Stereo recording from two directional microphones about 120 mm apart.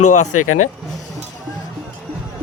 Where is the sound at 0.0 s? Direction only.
90° left.